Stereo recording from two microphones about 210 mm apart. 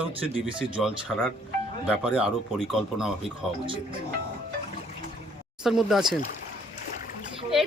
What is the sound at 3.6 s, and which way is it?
Speech, 25° right (ahead or behind).